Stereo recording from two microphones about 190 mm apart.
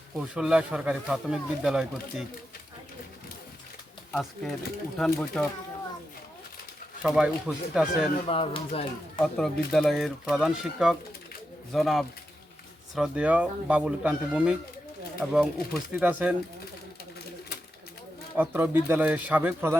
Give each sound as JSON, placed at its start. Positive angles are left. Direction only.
{"t": 0.2, "sound": "speech", "side_deg": -5}
{"t": 4.1, "sound": "speech", "side_deg": 0}
{"t": 7.0, "sound": "speech", "side_deg": -5}
{"t": 8.3, "sound": "speech", "side_deg": 30}
{"t": 9.2, "sound": "speech", "side_deg": 0}
{"t": 18.3, "sound": "speech", "side_deg": -10}